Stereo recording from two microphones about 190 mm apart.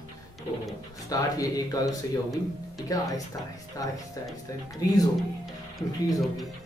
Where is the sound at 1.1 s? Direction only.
20° left (ahead or behind).